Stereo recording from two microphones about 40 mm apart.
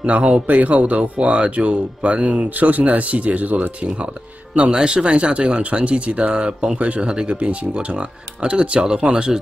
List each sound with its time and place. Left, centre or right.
0.5 s speech: right
2.5 s speech: right
4.6 s speech: right